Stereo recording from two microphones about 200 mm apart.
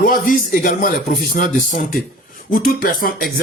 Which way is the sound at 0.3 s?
40° left (ahead or behind).